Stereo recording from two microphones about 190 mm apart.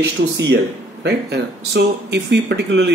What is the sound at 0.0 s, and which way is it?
Speech, 65° right (ahead or behind).